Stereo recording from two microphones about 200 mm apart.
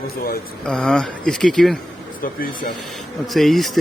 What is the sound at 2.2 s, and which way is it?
Speech, 45° left (ahead or behind).